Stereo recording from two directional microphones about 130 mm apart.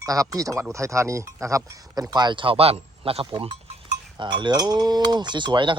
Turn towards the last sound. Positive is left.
turn(degrees=-35)  # may be behind; listen again after turning